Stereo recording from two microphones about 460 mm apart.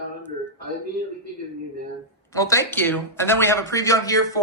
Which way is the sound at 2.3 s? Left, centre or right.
Centre.